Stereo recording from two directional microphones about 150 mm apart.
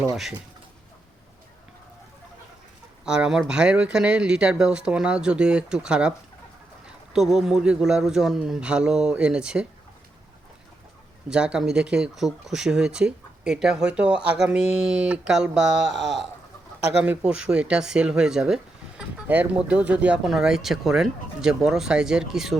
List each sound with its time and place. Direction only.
0.1 s speech: centre (ahead or behind)
3.1 s speech: 5° right (ahead or behind)
11.3 s speech: 5° right (ahead or behind)